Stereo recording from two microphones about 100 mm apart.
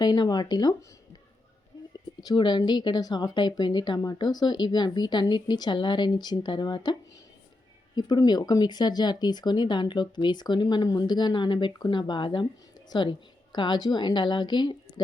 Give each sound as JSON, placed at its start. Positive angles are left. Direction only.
{"t": 0.0, "sound": "a woman's voice", "side_deg": 45}
{"t": 2.2, "sound": "a woman's voice", "side_deg": 45}
{"t": 7.9, "sound": "a woman's voice", "side_deg": 45}